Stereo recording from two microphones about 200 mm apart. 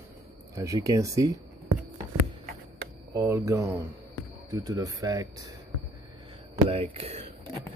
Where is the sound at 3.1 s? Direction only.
15° right (ahead or behind).